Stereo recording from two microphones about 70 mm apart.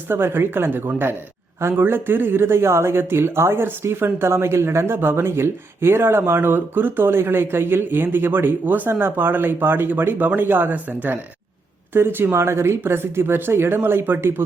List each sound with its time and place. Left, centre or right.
0.1 s speech: right